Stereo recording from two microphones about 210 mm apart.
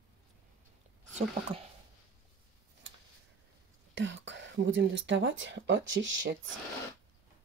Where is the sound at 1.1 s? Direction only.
30° right (ahead or behind).